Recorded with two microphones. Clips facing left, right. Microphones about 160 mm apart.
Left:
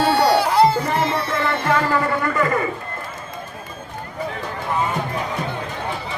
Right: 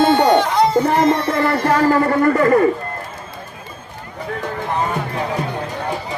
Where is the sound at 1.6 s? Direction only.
40° right (ahead or behind).